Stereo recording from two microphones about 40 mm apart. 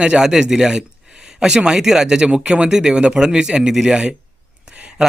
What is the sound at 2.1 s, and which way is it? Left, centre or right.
A man's voice, right.